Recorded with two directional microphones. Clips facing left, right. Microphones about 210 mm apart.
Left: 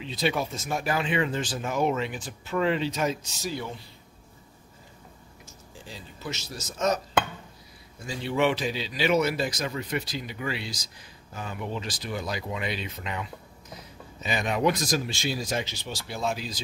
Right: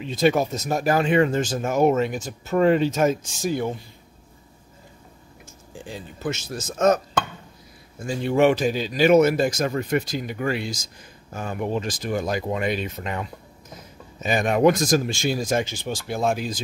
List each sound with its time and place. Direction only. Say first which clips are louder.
0.0 s speech: right 8 dB; 50° right (ahead or behind)
5.9 s speech: right 8 dB; 50° right (ahead or behind)
8.0 s speech: right 7 dB; 50° right (ahead or behind)